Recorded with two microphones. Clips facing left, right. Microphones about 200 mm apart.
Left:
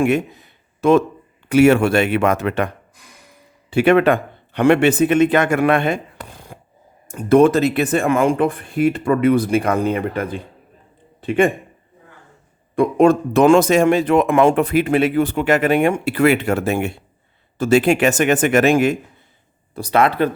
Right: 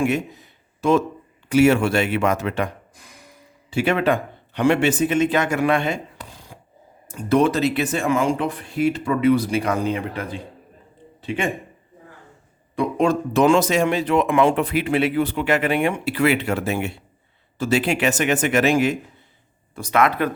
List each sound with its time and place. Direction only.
0.0 s speech: 60° left (ahead or behind)
3.7 s a man's voice: 60° left (ahead or behind)
12.7 s speech: 50° left (ahead or behind)
19.7 s speech: 35° left (ahead or behind)